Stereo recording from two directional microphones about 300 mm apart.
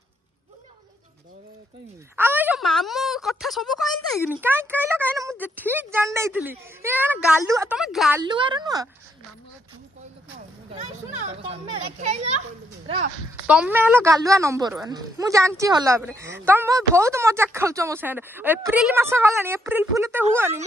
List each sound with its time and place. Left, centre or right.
2.1 s speech: centre
8.2 s speech: centre
10.7 s speech: right
13.5 s speech: centre